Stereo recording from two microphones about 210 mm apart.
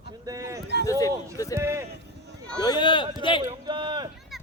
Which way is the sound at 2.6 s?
20° left (ahead or behind).